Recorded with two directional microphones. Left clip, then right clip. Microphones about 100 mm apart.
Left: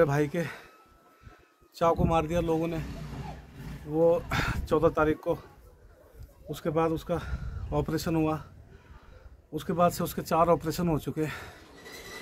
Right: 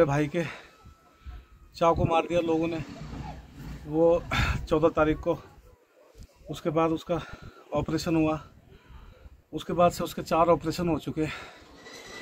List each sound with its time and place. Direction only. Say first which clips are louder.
0.0 s speech: right 1 dB; 20° left (ahead or behind)
1.8 s speech: right 2 dB; 25° left (ahead or behind)
3.9 s speech: right 1 dB; 25° left (ahead or behind)
6.5 s speech: right 2 dB; 25° left (ahead or behind)
9.5 s speech: right 2 dB; 25° left (ahead or behind)
9.8 s speech: right 2 dB; 35° left (ahead or behind)